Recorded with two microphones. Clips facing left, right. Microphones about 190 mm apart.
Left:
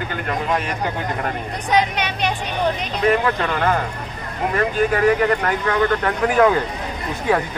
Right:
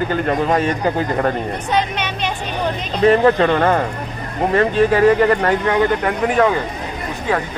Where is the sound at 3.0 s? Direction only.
35° right (ahead or behind).